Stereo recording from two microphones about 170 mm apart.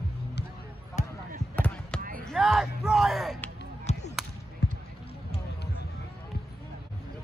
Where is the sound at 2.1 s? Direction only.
Centre (ahead or behind).